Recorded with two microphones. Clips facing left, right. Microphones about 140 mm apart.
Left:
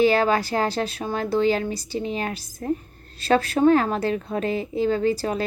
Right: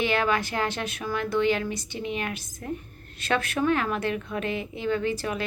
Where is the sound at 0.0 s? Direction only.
35° left (ahead or behind).